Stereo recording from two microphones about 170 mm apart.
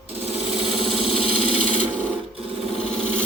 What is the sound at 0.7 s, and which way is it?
Engine, 5° right (ahead or behind).